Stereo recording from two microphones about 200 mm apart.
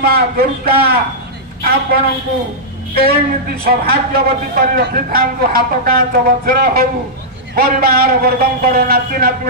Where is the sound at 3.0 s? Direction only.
50° right (ahead or behind).